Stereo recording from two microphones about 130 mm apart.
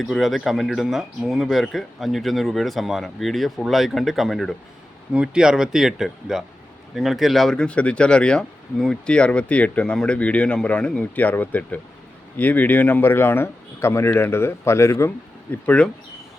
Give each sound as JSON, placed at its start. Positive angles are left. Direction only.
{"t": 0.0, "sound": "speech", "side_deg": 0}